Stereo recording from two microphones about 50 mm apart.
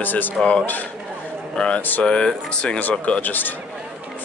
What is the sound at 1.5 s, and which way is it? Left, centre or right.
Speech, centre.